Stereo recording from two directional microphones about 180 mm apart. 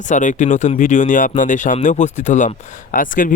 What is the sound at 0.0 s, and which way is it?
Speech, 45° left (ahead or behind).